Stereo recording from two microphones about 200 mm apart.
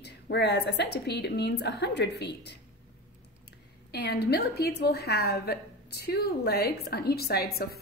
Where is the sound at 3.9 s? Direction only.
55° left (ahead or behind).